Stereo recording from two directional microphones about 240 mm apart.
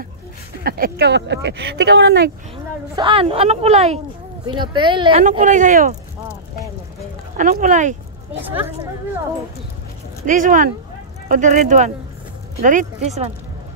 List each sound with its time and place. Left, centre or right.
0.7 s speech: right
2.5 s speech: right
5.4 s speech: right
7.3 s speech: right
8.5 s a woman's voice: centre
10.2 s speech: right